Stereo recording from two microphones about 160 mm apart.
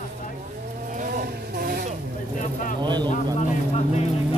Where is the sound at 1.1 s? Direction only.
90° right.